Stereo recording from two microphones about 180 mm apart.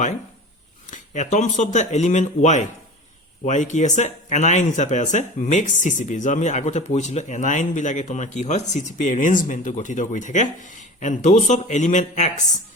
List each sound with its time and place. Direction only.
0.9 s speech: 40° left (ahead or behind)